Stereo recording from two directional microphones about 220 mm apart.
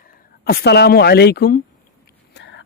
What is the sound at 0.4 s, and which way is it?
Speech, 45° left (ahead or behind).